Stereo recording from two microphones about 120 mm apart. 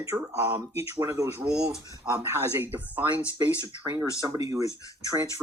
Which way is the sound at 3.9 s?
25° right (ahead or behind).